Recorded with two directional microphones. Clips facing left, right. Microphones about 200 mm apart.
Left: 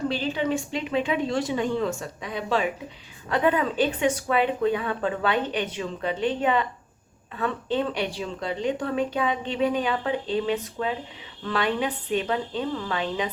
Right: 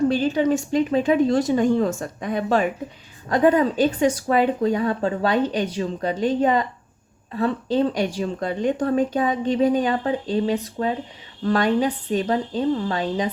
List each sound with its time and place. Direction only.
0.1 s a woman's voice: 45° right (ahead or behind)